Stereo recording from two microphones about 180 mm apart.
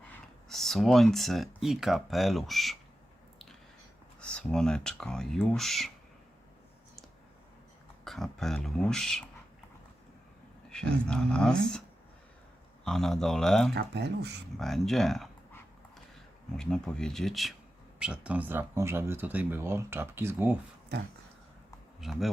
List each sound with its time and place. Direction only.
0.1 s speech: centre (ahead or behind)
4.2 s speech: 5° left (ahead or behind)
8.0 s speech: centre (ahead or behind)
10.7 s speech: 5° left (ahead or behind)
12.8 s speech: centre (ahead or behind)
13.7 s speech: 70° right (ahead or behind)
14.6 s speech: centre (ahead or behind)
16.6 s speech: 5° left (ahead or behind); by 20.6 s 10° right (ahead or behind)
22.0 s speech: centre (ahead or behind)